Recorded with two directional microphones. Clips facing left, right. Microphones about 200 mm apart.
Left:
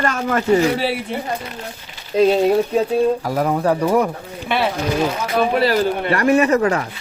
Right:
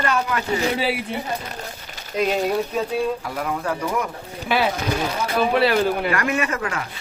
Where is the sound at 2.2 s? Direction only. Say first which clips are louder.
Left 7 dB; 35° left (ahead or behind).